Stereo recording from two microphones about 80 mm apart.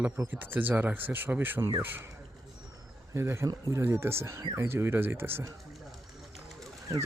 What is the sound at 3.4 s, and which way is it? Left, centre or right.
Speech, right.